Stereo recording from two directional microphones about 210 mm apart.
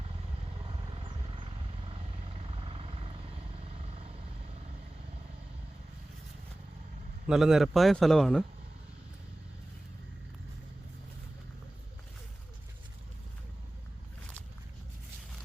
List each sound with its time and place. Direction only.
0.6 s wild animals: 25° right (ahead or behind)
1.9 s vehicle: 25° right (ahead or behind)
7.3 s a man's voice: centre (ahead or behind)